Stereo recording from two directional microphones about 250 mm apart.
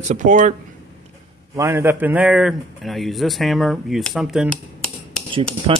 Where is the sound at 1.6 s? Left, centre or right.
Centre.